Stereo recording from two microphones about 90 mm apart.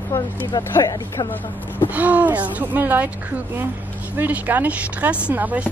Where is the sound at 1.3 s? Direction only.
20° left (ahead or behind).